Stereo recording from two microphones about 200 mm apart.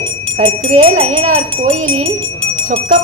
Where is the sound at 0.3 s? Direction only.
30° right (ahead or behind).